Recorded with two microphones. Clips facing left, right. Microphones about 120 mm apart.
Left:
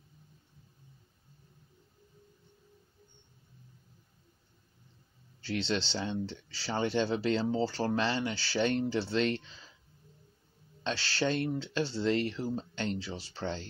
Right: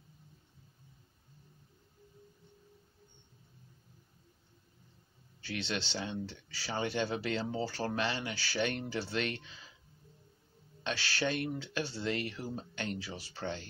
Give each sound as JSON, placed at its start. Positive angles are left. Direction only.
{"t": 5.4, "sound": "speech", "side_deg": 30}
{"t": 10.9, "sound": "speech", "side_deg": 30}